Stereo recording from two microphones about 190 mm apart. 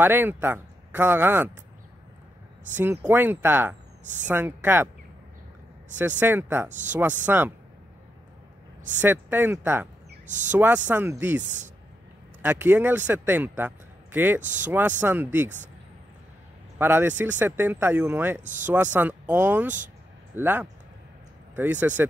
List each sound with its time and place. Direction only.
0.0 s speech: 10° right (ahead or behind)
2.7 s speech: 10° right (ahead or behind)
5.9 s speech: 10° right (ahead or behind)
9.0 s speech: 10° right (ahead or behind)
10.2 s speech: 40° right (ahead or behind)
10.5 s speech: 10° right (ahead or behind)
16.7 s speech: 10° right (ahead or behind)
18.4 s speech: 40° right (ahead or behind)
18.9 s speech: 10° right (ahead or behind)